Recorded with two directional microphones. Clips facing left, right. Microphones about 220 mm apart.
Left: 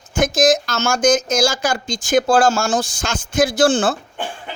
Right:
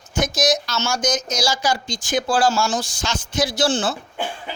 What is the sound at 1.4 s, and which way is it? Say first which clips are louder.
Speech: left 4 dB; 50° left (ahead or behind).